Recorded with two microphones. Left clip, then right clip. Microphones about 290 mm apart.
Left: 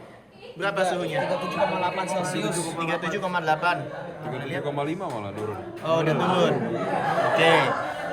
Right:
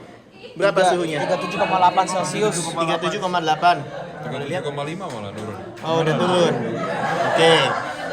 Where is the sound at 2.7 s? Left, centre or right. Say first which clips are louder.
Right 6 dB; centre.